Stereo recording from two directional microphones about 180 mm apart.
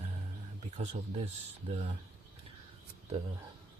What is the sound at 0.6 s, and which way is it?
Speech, 35° right (ahead or behind).